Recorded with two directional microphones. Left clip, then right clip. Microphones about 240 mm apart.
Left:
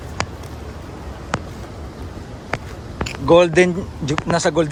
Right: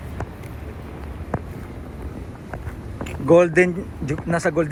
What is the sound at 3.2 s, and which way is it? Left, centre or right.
Speech, centre.